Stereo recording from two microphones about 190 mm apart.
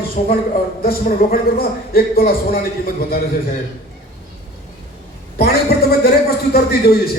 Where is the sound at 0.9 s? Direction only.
50° left (ahead or behind).